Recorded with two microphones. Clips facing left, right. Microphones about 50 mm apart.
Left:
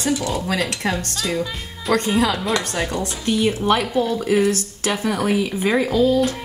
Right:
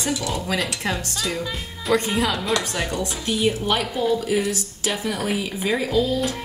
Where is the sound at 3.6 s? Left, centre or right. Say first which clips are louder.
Left 3 dB; left.